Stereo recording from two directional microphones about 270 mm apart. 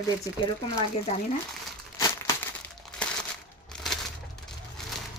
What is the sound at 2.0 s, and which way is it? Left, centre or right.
Crumpling, centre.